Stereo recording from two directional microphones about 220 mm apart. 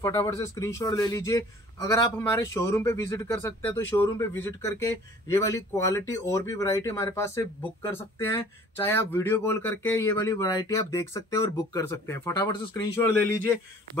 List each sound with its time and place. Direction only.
0.0 s a man's voice: 15° left (ahead or behind)